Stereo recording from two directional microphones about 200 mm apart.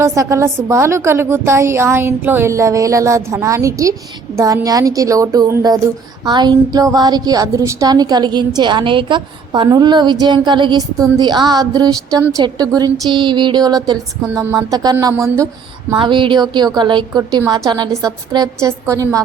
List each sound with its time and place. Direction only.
0.0 s a woman's voice: 15° right (ahead or behind)